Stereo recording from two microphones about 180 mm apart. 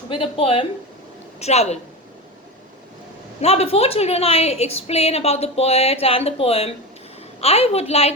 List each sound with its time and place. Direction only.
0.1 s a woman's voice: 30° left (ahead or behind)
3.4 s a woman's voice: 35° left (ahead or behind)